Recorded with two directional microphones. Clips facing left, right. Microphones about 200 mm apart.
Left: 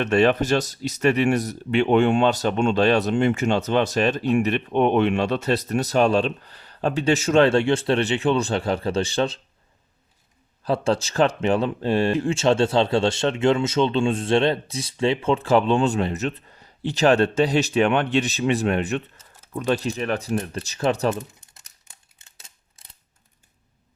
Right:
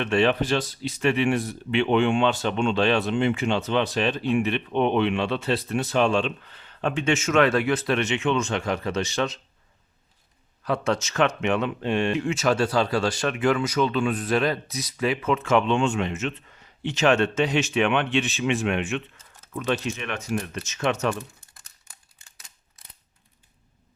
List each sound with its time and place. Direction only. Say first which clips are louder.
0.0 s speech: left 3 dB; 45° left (ahead or behind)
10.6 s speech: left 3 dB; 30° left (ahead or behind)
21.2 s crumpling: left 3 dB; 20° left (ahead or behind)
22.2 s scissors: left 1 dB; 25° left (ahead or behind)